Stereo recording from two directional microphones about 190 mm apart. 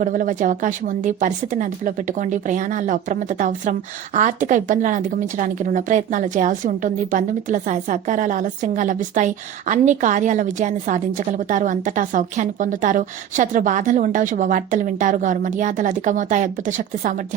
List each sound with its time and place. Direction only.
0.0 s speech: 45° right (ahead or behind)